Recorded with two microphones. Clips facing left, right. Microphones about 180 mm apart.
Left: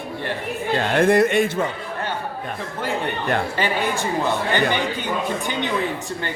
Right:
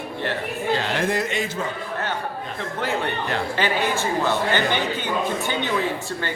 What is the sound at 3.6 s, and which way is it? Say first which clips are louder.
Speech: even; 15° left (ahead or behind).